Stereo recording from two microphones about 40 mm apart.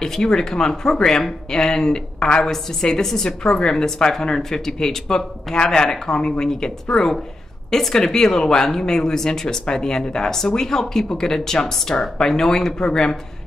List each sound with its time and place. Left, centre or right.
0.0 s a woman's voice: centre